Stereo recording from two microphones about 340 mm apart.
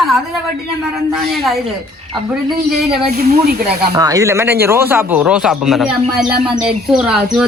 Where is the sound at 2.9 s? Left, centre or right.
Right.